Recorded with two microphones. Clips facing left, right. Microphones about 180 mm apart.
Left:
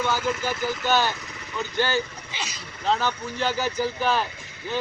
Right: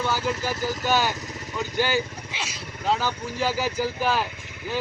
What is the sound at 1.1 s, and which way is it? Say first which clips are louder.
Vehicle: right 4 dB; 40° right (ahead or behind).